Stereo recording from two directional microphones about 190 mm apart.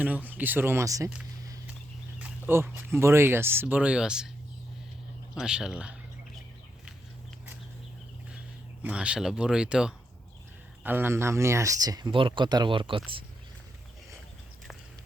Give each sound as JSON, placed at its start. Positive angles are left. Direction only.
{"t": 0.0, "sound": "speech", "side_deg": -10}
{"t": 2.1, "sound": "speech", "side_deg": -10}
{"t": 5.3, "sound": "speech", "side_deg": -5}
{"t": 8.8, "sound": "speech", "side_deg": -5}